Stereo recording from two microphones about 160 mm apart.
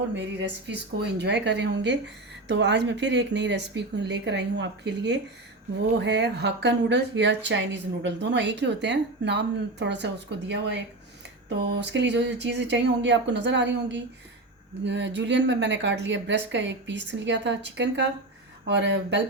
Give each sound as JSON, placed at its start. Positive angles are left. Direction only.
{"t": 0.2, "sound": "speech", "side_deg": -90}